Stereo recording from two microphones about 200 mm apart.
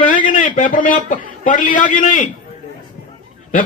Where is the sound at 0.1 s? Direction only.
40° left (ahead or behind).